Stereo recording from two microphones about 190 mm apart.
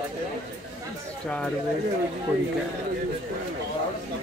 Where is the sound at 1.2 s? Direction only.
5° left (ahead or behind).